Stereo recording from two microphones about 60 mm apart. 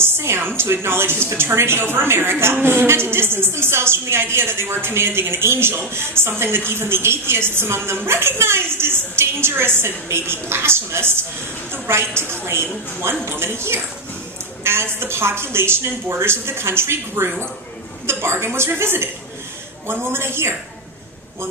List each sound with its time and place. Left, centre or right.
0.0 s a woman's voice: right
14.6 s a sound: right
14.9 s a woman's voice: right